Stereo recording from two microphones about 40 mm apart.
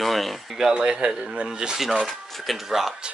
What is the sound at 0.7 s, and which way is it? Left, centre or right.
Speech, right.